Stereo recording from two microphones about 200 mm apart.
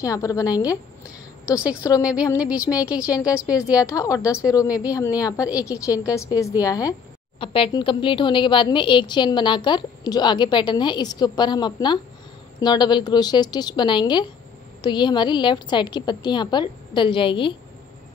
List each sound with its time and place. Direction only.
0.0 s a woman's voice: 15° left (ahead or behind)
1.0 s a sound: 5° right (ahead or behind)
1.8 s a woman's voice: 15° left (ahead or behind)
2.3 s a woman's voice: 5° right (ahead or behind)
3.7 s a woman's voice: 15° left (ahead or behind)